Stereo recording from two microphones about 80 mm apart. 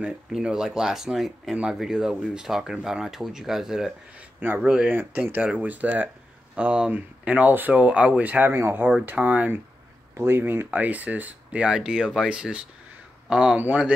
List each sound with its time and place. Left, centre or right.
0.0 s speech: centre
4.2 s speech: right
4.6 s speech: centre
4.9 s speech: right
8.5 s speech: right; by 13.6 s centre
13.6 s speech: right